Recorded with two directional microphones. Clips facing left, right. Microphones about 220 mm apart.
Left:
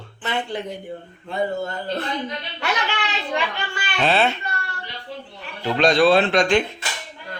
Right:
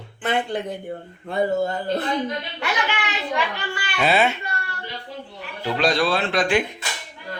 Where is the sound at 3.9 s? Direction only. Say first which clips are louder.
Even; 10° right (ahead or behind).